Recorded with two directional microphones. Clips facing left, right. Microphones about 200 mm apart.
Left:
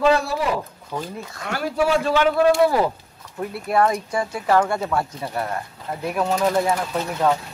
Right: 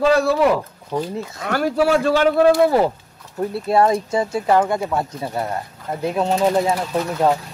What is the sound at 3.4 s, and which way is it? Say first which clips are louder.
Speech: right 3 dB; 30° right (ahead or behind).